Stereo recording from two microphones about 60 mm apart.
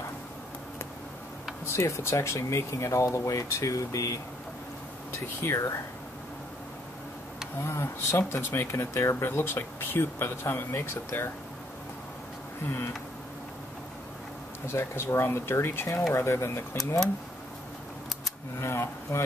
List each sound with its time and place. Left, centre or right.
1.7 s speech: left
5.4 s speech: left
7.6 s speech: left
14.7 s speech: left
18.6 s a sound: left